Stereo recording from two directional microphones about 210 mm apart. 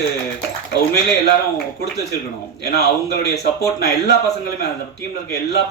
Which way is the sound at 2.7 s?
50° left (ahead or behind).